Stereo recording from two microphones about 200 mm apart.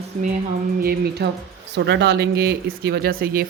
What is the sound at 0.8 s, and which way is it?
Speech, 50° right (ahead or behind).